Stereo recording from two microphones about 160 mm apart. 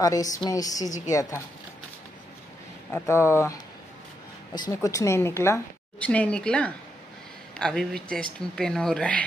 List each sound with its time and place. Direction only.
0.0 s a woman's voice: 20° left (ahead or behind)
2.9 s a woman's voice: 15° left (ahead or behind)
4.6 s a woman's voice: 20° left (ahead or behind); by 9.2 s 5° left (ahead or behind)